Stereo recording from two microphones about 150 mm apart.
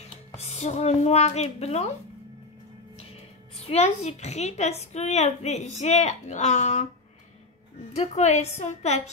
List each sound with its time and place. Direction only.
0.3 s a woman's voice: 45° left (ahead or behind)
3.6 s a woman's voice: 45° left (ahead or behind)
7.9 s a woman's voice: 45° left (ahead or behind)